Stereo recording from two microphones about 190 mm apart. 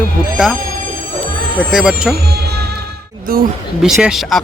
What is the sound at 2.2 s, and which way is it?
Music, 60° right (ahead or behind).